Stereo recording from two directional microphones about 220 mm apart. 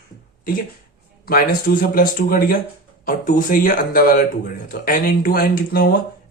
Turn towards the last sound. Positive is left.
turn(degrees=40)  # may be behind; listen again after turning